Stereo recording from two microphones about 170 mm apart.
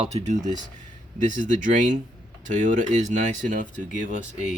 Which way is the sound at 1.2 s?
45° right (ahead or behind).